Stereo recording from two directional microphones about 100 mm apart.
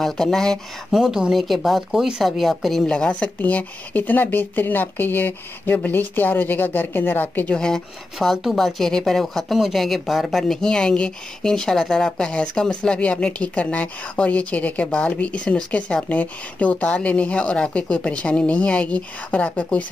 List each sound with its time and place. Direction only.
0.0 s speech: 5° left (ahead or behind)
7.5 s speech: 5° left (ahead or behind)